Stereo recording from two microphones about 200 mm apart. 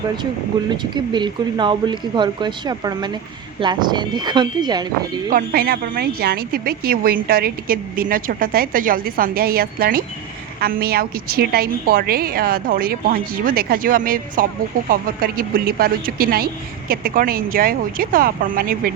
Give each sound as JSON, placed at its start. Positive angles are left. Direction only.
{"t": 0.7, "sound": "speech", "side_deg": -20}
{"t": 5.3, "sound": "a woman's voice", "side_deg": -50}